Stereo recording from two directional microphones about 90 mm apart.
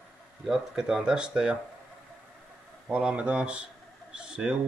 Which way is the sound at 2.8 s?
10° right (ahead or behind).